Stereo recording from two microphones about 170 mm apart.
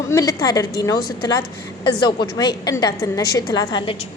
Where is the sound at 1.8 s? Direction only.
25° left (ahead or behind).